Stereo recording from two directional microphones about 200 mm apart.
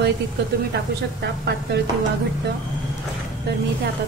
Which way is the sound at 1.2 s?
55° right (ahead or behind).